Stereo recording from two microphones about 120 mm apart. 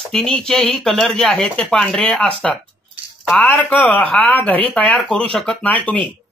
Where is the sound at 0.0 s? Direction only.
5° left (ahead or behind).